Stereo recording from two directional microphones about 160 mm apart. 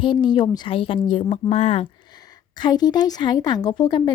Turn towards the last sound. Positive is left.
turn(degrees=30)  # may be behind; listen again after turning